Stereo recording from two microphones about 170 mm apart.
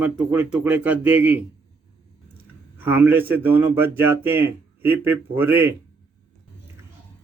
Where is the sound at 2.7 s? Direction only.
10° right (ahead or behind).